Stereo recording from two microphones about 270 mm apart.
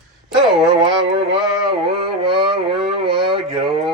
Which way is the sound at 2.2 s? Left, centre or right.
Centre.